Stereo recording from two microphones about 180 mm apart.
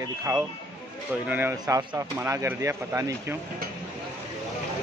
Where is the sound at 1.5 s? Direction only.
20° right (ahead or behind).